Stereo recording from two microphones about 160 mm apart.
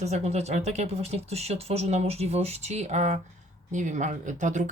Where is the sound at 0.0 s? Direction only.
45° right (ahead or behind).